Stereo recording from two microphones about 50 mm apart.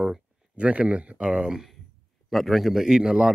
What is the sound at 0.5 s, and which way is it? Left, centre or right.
Speech, right.